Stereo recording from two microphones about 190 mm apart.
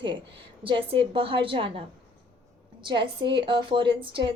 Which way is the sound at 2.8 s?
25° right (ahead or behind).